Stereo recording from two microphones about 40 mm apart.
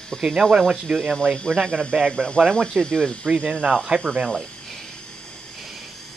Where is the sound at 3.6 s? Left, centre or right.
Right.